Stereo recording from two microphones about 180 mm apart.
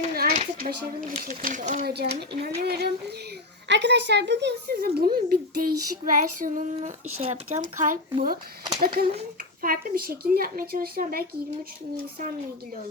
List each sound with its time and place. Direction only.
0.0 s speech: 55° right (ahead or behind)
1.9 s speech: 65° right (ahead or behind)
3.7 s speech: 80° right; by 8.4 s 50° right (ahead or behind)
9.6 s speech: 50° right (ahead or behind)